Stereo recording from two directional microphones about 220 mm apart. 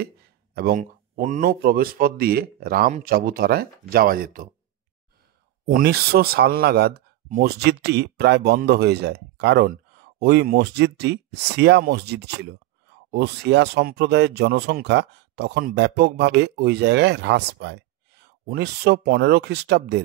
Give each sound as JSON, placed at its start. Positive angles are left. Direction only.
{"t": 0.6, "sound": "speech", "side_deg": -40}
{"t": 5.7, "sound": "speech", "side_deg": -45}